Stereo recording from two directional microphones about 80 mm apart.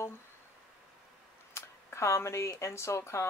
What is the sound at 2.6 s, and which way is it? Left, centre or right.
Speech, left.